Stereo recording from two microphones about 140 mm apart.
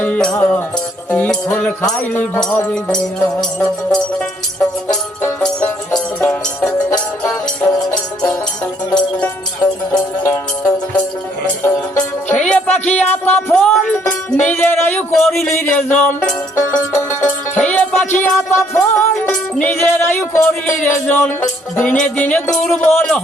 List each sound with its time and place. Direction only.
0.0 s music: 5° left (ahead or behind)
10.2 s music: 15° left (ahead or behind)
15.5 s music: 15° left (ahead or behind)